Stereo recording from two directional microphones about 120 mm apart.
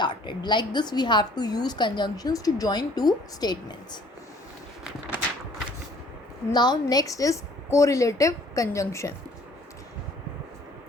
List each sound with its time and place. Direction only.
0.0 s a woman's voice: 40° left (ahead or behind)
6.5 s a woman's voice: 35° left (ahead or behind)